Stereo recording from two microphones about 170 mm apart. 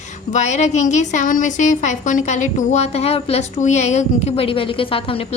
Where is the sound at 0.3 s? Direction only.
45° left (ahead or behind).